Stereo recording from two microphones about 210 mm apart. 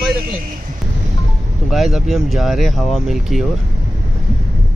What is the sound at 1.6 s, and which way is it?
Speech, centre (ahead or behind).